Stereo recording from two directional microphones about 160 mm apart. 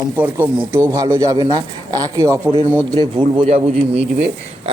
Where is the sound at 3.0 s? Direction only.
30° right (ahead or behind).